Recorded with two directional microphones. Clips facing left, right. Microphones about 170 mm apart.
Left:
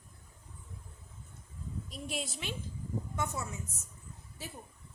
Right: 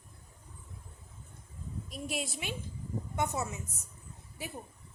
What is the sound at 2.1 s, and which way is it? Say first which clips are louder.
Speech: right 2 dB; 10° right (ahead or behind).